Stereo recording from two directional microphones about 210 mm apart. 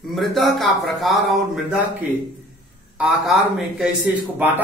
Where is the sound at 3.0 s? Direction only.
Centre (ahead or behind).